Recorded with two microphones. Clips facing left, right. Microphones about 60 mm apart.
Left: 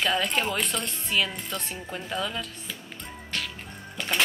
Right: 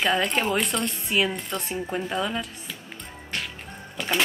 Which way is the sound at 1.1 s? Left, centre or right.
Centre.